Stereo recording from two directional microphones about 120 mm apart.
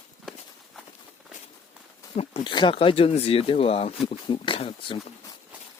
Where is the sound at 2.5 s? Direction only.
40° left (ahead or behind).